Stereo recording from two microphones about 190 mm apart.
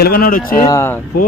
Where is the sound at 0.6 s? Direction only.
15° left (ahead or behind).